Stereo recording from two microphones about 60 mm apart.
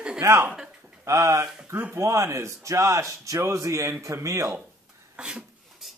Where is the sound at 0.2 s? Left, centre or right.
Right.